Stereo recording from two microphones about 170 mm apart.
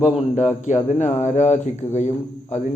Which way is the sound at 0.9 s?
45° left (ahead or behind).